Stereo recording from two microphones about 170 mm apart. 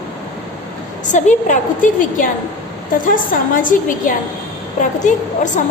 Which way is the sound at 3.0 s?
55° left (ahead or behind).